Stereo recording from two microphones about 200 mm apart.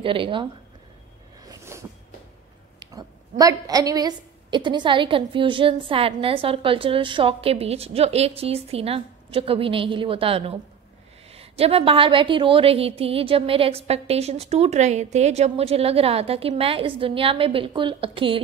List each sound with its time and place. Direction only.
0.0 s a woman's voice: 25° right (ahead or behind)
1.5 s a sound: 15° right (ahead or behind)
3.9 s a woman's voice: 20° right (ahead or behind)